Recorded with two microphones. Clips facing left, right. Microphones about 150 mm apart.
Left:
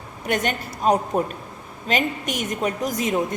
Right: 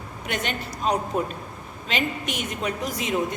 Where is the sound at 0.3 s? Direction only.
45° left (ahead or behind).